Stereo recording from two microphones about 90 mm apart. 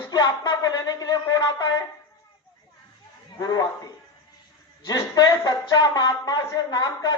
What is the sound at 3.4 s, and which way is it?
Speech, 45° left (ahead or behind).